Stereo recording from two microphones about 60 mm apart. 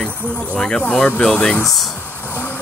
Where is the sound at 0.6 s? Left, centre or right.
Centre.